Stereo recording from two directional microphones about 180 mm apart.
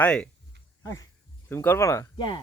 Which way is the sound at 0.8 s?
20° left (ahead or behind).